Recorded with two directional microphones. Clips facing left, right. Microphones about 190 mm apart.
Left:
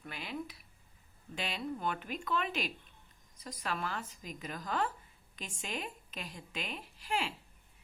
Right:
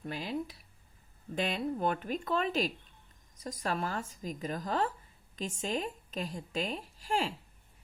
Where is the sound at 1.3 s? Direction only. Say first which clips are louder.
Right 6 dB; 50° right (ahead or behind).